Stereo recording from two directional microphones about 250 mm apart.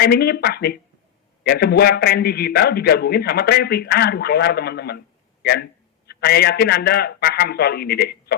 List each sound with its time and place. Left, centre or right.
0.0 s a man's voice: left